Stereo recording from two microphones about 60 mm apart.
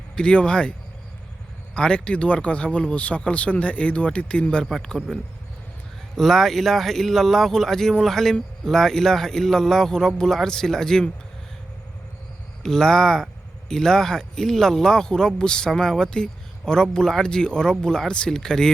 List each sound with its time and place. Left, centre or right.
0.2 s speech: centre
1.7 s speech: centre
4.6 s speech: centre
6.1 s speech: centre
12.6 s speech: centre